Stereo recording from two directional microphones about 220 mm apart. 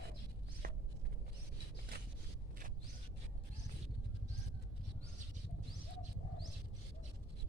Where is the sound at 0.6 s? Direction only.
40° right (ahead or behind).